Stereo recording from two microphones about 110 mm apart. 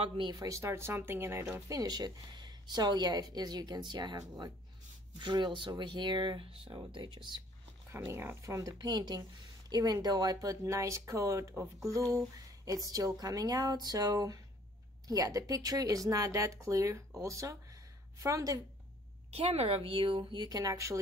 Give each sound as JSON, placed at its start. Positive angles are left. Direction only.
{"t": 0.0, "sound": "speech", "side_deg": -45}
{"t": 1.7, "sound": "a woman's voice", "side_deg": -35}
{"t": 8.1, "sound": "a woman's voice", "side_deg": -20}
{"t": 19.3, "sound": "a woman's voice", "side_deg": -65}